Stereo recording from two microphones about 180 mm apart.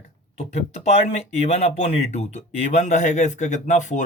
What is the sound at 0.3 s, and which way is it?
Speech, 35° left (ahead or behind).